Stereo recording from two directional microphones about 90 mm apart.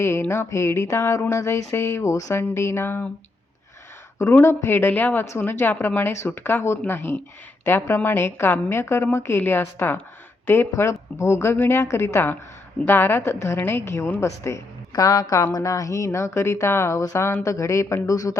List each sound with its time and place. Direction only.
0.0 s a woman's voice: 30° left (ahead or behind)
4.4 s a woman's voice: 25° left (ahead or behind)